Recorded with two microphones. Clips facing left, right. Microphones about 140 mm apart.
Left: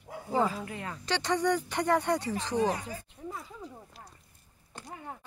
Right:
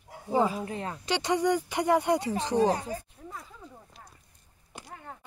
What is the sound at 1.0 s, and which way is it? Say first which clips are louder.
Speech: right 2 dB; 15° right (ahead or behind).